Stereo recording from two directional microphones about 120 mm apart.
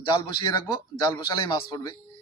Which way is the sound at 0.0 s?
40° left (ahead or behind).